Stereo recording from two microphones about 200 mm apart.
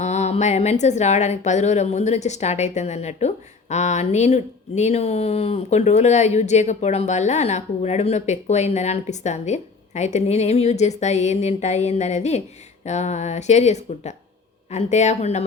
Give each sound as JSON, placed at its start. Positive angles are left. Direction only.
{"t": 0.0, "sound": "a woman's voice", "side_deg": 35}